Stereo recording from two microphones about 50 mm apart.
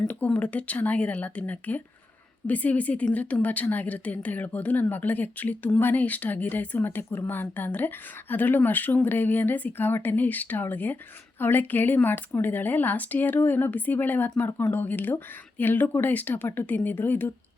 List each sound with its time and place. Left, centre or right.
0.3 s a woman's voice: left
6.7 s a woman's voice: left